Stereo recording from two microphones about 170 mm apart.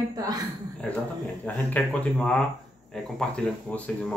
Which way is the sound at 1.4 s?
10° left (ahead or behind).